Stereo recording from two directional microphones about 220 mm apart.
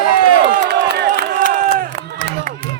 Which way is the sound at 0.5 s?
50° right (ahead or behind).